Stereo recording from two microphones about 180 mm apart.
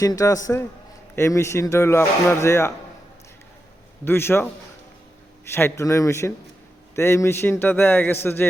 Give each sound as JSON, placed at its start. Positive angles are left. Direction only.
{"t": 0.0, "sound": "a man's voice", "side_deg": 20}
{"t": 4.0, "sound": "speech", "side_deg": 10}
{"t": 5.5, "sound": "speech", "side_deg": 15}